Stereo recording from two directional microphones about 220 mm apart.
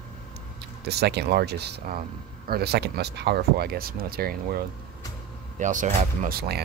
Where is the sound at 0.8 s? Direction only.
50° right (ahead or behind).